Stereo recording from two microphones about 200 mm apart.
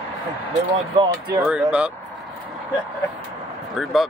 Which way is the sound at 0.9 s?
20° right (ahead or behind).